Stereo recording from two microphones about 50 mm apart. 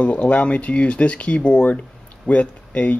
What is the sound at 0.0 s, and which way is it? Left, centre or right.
Speech, left.